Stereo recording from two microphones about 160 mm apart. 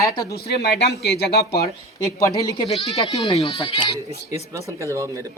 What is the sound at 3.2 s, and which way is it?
Speech, 35° left (ahead or behind).